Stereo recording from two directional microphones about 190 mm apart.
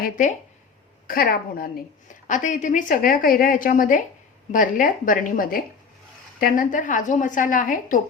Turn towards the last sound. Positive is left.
turn(degrees=45)  # may be behind; listen again after turning